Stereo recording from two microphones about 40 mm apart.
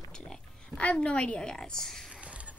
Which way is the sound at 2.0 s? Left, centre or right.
Right.